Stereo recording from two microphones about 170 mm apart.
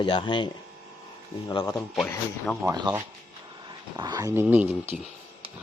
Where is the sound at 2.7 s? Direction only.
25° right (ahead or behind).